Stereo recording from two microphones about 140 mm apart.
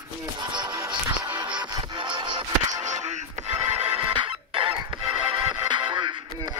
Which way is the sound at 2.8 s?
55° right (ahead or behind).